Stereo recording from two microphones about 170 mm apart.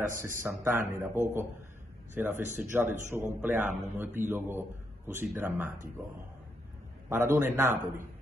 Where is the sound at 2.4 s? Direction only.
45° right (ahead or behind).